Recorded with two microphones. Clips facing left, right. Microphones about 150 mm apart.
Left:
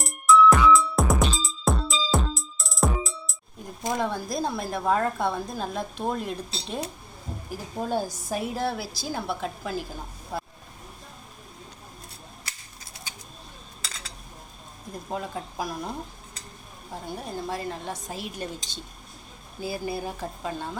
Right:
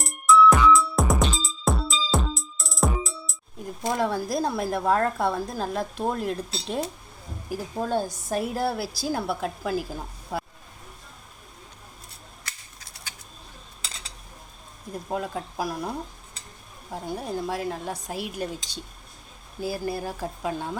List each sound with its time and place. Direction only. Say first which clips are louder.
0.0 s music: even; centre (ahead or behind)
3.8 s speech: right 2 dB; 5° right (ahead or behind)
15.1 s speech: right 2 dB; centre (ahead or behind)